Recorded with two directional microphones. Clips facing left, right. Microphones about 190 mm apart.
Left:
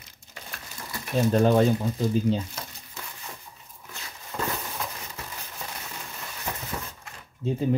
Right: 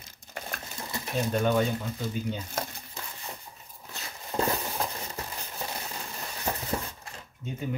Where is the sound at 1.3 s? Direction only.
35° left (ahead or behind).